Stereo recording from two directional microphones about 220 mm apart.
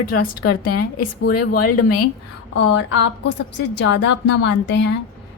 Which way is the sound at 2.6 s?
55° left (ahead or behind).